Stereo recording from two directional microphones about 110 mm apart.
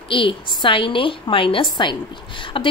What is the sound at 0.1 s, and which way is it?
A woman's voice, 50° left (ahead or behind).